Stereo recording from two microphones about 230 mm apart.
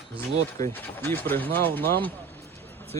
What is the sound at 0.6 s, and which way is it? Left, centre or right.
Speech, centre.